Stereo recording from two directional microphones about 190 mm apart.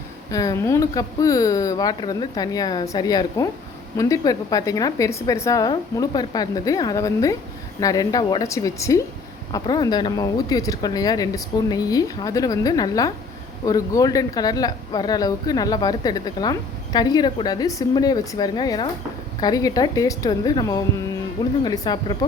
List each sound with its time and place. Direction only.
0.3 s a woman's voice: 15° left (ahead or behind)